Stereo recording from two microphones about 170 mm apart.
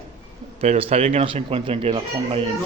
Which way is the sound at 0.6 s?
35° right (ahead or behind).